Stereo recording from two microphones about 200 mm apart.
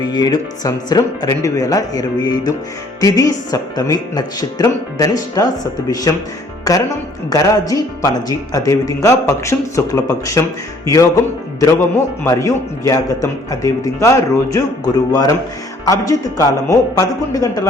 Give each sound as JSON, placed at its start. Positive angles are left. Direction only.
{"t": 0.0, "sound": "speech", "side_deg": 20}
{"t": 7.3, "sound": "speech", "side_deg": 20}
{"t": 12.2, "sound": "speech", "side_deg": 15}